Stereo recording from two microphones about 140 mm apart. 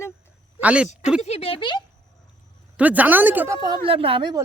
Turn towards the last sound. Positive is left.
turn(degrees=-35)  # may be behind; listen again after turning